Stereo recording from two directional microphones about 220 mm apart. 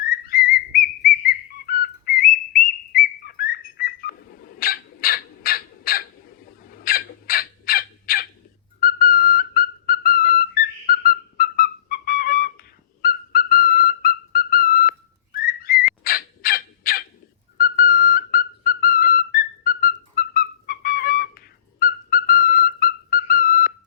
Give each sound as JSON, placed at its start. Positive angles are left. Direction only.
{"t": 0.0, "sound": "whistle", "side_deg": 40}
{"t": 16.0, "sound": "crow", "side_deg": 40}
{"t": 17.6, "sound": "whistle", "side_deg": 40}